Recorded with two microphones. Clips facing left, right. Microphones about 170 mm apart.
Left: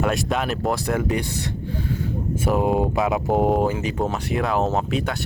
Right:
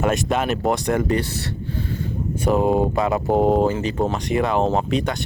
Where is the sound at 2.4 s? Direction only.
5° left (ahead or behind).